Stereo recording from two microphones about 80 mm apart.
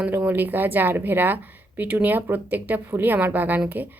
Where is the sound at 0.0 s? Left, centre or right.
Centre.